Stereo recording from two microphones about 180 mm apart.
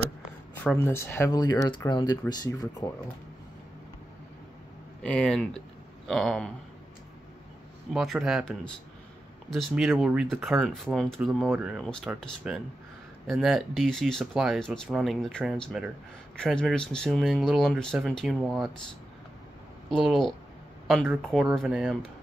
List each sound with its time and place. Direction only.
0.7 s speech: 15° left (ahead or behind)
5.0 s speech: 5° left (ahead or behind)
7.9 s speech: centre (ahead or behind)
19.9 s speech: centre (ahead or behind)